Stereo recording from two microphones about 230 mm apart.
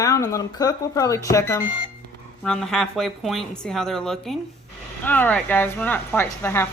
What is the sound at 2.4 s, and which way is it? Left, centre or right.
A woman's voice, centre.